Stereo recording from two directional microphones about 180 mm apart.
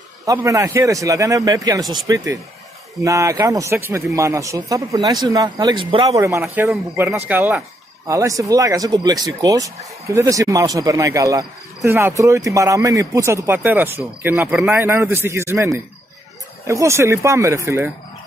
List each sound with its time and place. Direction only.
0.2 s speech: 20° right (ahead or behind)